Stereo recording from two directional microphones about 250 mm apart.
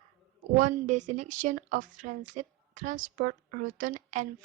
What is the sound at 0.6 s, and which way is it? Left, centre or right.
A woman's voice, right.